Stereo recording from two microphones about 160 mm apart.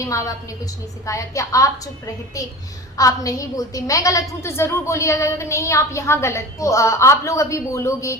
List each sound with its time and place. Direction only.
0.0 s a woman's voice: 20° left (ahead or behind)
3.0 s a woman's voice: 20° left (ahead or behind)